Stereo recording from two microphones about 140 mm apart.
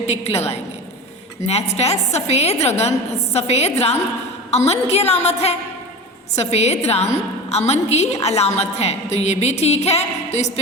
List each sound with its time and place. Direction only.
0.0 s a woman's voice: 50° left (ahead or behind)